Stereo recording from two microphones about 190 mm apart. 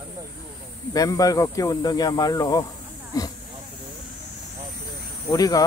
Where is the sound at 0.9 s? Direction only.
20° left (ahead or behind).